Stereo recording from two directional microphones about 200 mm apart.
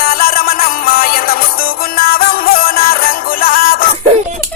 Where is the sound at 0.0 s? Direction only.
45° left (ahead or behind).